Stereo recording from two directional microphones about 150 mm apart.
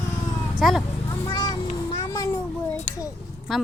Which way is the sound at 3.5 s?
Centre (ahead or behind).